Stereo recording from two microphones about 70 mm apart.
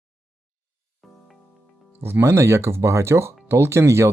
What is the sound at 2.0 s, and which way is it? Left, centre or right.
Speech, right.